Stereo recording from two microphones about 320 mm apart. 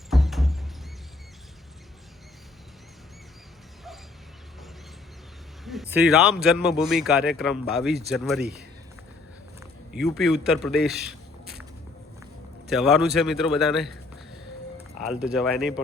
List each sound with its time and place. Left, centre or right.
0.1 s music: centre
5.6 s speech: centre
9.6 s a man's voice: centre
12.7 s speech: centre
15.0 s speech: centre